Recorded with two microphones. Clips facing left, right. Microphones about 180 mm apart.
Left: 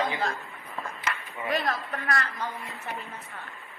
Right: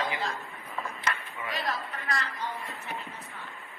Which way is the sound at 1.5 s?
55° left (ahead or behind).